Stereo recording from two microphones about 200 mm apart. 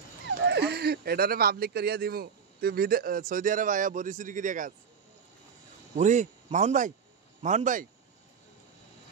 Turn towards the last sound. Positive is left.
turn(degrees=-40)  # may be behind; listen again after turning